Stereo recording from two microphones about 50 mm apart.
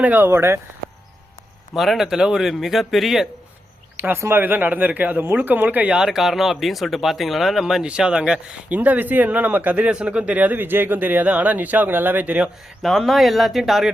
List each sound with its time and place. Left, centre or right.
0.0 s speech: right
0.3 s speech: right
1.7 s speech: centre
4.3 s speech: right
5.9 s speech: centre
7.9 s speech: centre
8.7 s speech: right
9.9 s speech: right
12.2 s speech: right
12.8 s speech: centre